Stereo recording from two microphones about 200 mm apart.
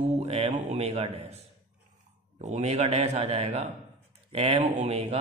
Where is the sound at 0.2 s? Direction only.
30° right (ahead or behind).